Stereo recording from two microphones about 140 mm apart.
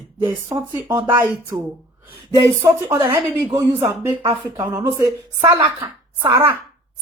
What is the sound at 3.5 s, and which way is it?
A woman's voice, 30° right (ahead or behind).